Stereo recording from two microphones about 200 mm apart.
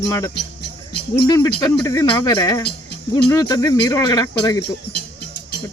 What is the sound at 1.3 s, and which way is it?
Speech, 15° left (ahead or behind).